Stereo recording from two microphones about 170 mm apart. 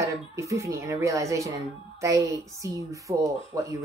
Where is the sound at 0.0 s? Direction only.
15° right (ahead or behind).